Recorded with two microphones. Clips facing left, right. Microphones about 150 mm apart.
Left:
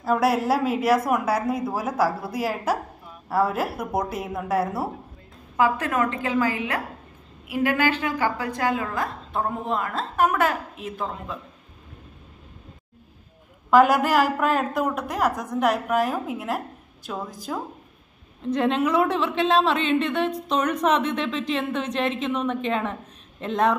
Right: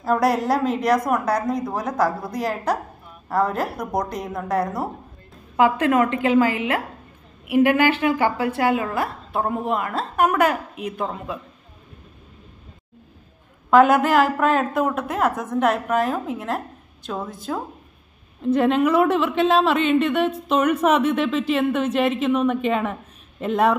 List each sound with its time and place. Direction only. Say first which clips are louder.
0.0 s a woman's voice: right 2 dB; 5° left (ahead or behind)
5.6 s a woman's voice: right 5 dB; 20° right (ahead or behind)
6.5 s a woman's voice: right 4 dB; 60° right (ahead or behind)
8.6 s a woman's voice: right 2 dB; 5° right (ahead or behind)
13.7 s a woman's voice: right 2 dB; centre (ahead or behind)
18.4 s a woman's voice: right 4 dB; 5° right (ahead or behind)